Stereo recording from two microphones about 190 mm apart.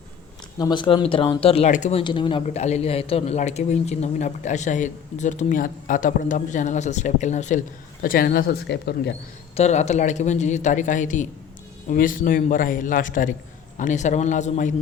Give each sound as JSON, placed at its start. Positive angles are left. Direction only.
{"t": 0.6, "sound": "speech", "side_deg": 25}
{"t": 8.0, "sound": "a man's voice", "side_deg": 50}
{"t": 9.6, "sound": "a man's voice", "side_deg": 35}